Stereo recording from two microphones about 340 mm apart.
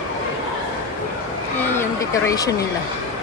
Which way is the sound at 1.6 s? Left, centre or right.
Centre.